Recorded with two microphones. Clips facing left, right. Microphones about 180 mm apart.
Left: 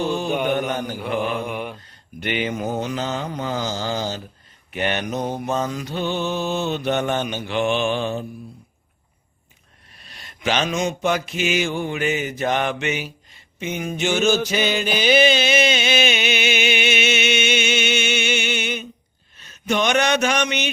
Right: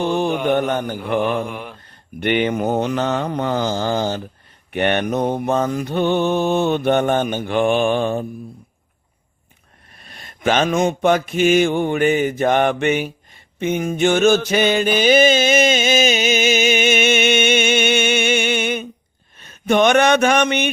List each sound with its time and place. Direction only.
0.1 s mantra: 55° right (ahead or behind)
1.5 s mantra: 5° left (ahead or behind)
2.2 s mantra: 55° right (ahead or behind)
10.0 s mantra: 50° right (ahead or behind)
13.6 s a sound: 50° right (ahead or behind)
19.4 s speech: 55° right (ahead or behind)